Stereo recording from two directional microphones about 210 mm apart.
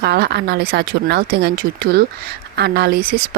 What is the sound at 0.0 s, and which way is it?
Speech, 50° right (ahead or behind).